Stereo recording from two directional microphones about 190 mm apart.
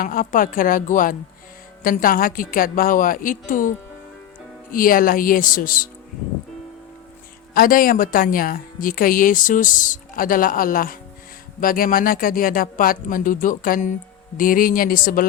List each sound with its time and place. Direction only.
0.0 s a woman's voice: 45° left (ahead or behind)
4.7 s a woman's voice: 50° left (ahead or behind)
7.5 s a woman's voice: 50° left (ahead or behind)